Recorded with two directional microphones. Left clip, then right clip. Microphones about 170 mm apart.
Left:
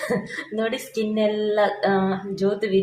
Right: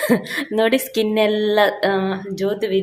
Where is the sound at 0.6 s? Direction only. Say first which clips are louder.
Right 8 dB; 45° right (ahead or behind).